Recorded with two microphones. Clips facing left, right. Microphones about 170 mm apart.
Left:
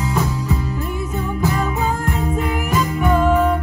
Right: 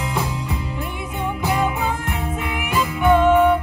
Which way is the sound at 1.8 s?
40° left (ahead or behind).